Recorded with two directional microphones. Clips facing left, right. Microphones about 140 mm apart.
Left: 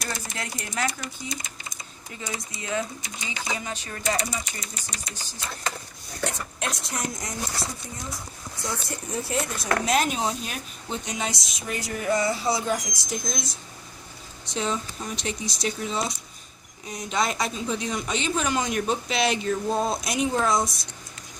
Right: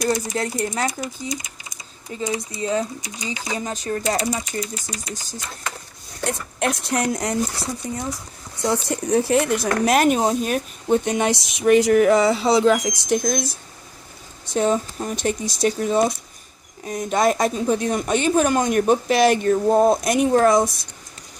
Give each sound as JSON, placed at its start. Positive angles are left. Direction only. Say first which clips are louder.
{"t": 0.0, "sound": "speech", "louder": "right 12 dB", "side_deg": -35}
{"t": 1.3, "sound": "speech", "louder": "right 6 dB", "side_deg": -10}
{"t": 2.2, "sound": "speech", "louder": "right 10 dB", "side_deg": -35}
{"t": 6.6, "sound": "a woman's voice", "louder": "right 9 dB", "side_deg": -65}
{"t": 7.8, "sound": "speech", "louder": "right 9 dB", "side_deg": -80}
{"t": 14.5, "sound": "speech", "louder": "right 9 dB", "side_deg": -50}